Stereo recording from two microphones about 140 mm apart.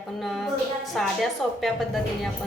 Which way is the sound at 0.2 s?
Centre (ahead or behind).